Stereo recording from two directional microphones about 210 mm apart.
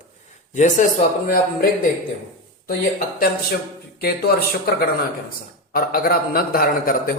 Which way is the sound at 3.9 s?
45° left (ahead or behind).